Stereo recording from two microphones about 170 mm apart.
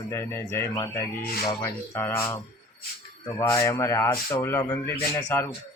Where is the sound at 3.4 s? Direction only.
15° left (ahead or behind).